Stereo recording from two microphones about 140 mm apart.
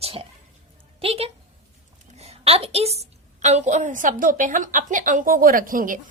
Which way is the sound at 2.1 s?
45° right (ahead or behind).